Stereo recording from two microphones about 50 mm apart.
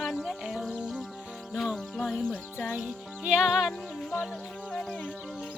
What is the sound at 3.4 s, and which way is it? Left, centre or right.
Music, centre.